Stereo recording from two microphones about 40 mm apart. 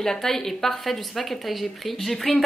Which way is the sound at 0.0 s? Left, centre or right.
Centre.